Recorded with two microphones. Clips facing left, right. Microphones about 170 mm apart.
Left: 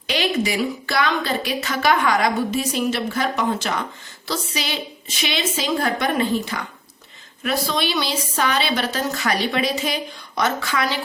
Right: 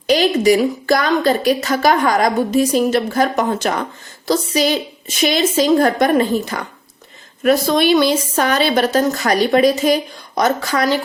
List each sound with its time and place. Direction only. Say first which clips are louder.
0.1 s a woman's voice: right 9 dB; 40° right (ahead or behind)